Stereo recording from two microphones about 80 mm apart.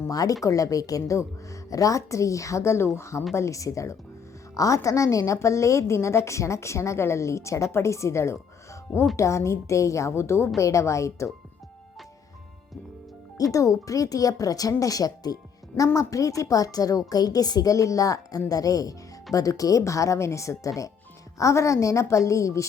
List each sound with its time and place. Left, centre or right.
0.1 s a woman's voice: left
13.3 s a woman's voice: left